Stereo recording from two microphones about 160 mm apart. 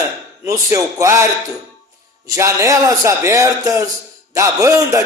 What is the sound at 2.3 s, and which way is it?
Speech, 20° right (ahead or behind).